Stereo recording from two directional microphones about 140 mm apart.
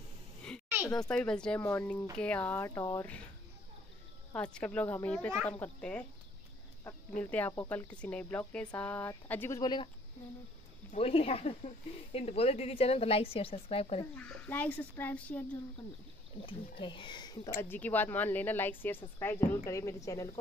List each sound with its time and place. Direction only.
0.9 s speech: 5° left (ahead or behind)
1.6 s a woman's voice: 20° left (ahead or behind)
4.4 s speech: 10° left (ahead or behind)
9.6 s speech: 30° left (ahead or behind)
10.9 s speech: 45° left (ahead or behind)
14.1 s speech: 10° left (ahead or behind)
16.4 s speech: 35° left (ahead or behind)
17.6 s a woman's voice: 15° left (ahead or behind)